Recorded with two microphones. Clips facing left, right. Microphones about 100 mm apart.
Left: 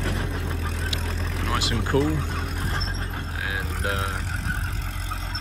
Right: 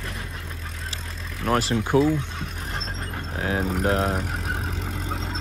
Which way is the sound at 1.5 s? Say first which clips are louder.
Right 6 dB; 40° right (ahead or behind).